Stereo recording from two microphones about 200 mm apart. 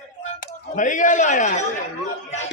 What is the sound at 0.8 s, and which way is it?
Speech, 40° left (ahead or behind).